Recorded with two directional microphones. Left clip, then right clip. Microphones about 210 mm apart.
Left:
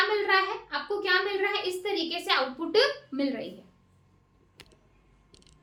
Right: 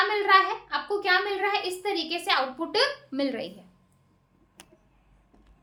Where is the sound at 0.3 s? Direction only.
45° right (ahead or behind).